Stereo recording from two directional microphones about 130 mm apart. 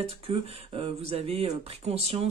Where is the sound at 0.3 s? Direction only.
50° right (ahead or behind).